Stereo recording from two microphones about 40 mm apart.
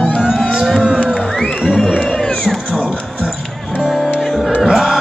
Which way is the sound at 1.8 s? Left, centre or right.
Centre.